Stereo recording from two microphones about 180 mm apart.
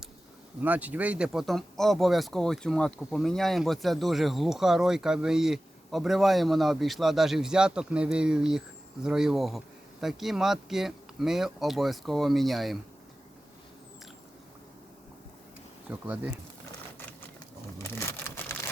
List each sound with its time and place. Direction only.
0.6 s speech: 10° right (ahead or behind)
15.9 s speech: 10° right (ahead or behind)
17.8 s a sound: 10° left (ahead or behind)